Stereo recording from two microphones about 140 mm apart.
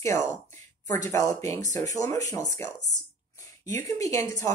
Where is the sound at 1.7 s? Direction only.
25° left (ahead or behind).